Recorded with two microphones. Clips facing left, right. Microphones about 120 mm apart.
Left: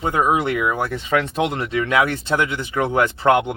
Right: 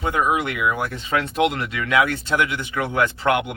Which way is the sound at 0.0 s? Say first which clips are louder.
Left 2 dB; 30° left (ahead or behind).